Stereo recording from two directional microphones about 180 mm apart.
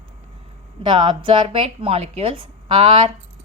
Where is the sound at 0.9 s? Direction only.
25° right (ahead or behind).